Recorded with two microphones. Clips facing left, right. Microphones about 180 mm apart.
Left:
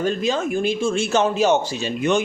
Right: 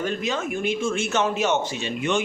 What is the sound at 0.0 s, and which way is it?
Speech, 30° left (ahead or behind).